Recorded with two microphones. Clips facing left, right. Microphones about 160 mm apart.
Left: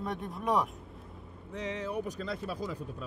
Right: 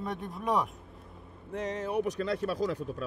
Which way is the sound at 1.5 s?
45° right (ahead or behind).